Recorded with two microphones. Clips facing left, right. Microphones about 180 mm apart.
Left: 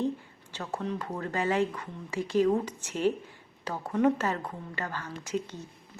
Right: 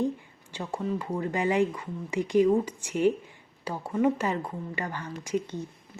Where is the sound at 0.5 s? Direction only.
10° right (ahead or behind).